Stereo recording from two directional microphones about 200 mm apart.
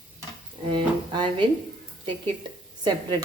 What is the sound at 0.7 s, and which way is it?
Music, 25° right (ahead or behind).